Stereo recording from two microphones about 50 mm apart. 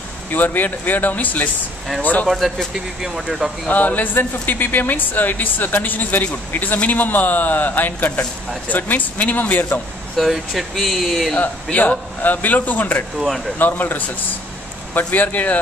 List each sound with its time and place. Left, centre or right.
0.3 s speech: left
2.2 s speech: centre
3.6 s speech: left
10.2 s speech: centre
11.3 s speech: left